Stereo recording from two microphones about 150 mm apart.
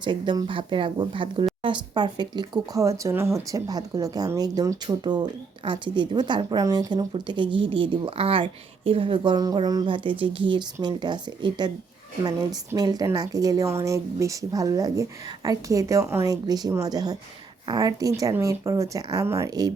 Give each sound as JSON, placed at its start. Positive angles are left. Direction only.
{"t": 0.0, "sound": "speech", "side_deg": -30}